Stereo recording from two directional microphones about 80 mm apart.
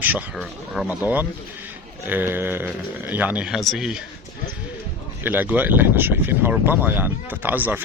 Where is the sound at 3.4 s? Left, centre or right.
Centre.